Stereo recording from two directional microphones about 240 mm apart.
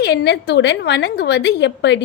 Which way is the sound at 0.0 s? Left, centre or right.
Left.